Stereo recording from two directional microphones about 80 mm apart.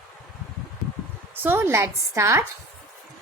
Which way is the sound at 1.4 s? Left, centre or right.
Right.